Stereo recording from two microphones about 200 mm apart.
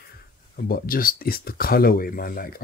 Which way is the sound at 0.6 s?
45° left (ahead or behind).